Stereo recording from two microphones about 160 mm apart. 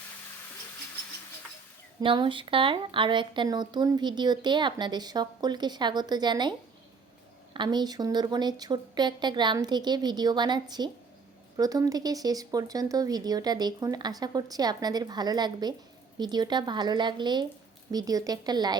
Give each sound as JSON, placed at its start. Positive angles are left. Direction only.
{"t": 2.0, "sound": "a woman's voice", "side_deg": -30}
{"t": 7.5, "sound": "a woman's voice", "side_deg": -30}